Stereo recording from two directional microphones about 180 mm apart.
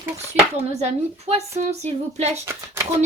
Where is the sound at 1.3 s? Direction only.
35° right (ahead or behind).